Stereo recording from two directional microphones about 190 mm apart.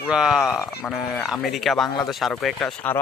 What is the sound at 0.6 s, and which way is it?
Speech, 15° left (ahead or behind).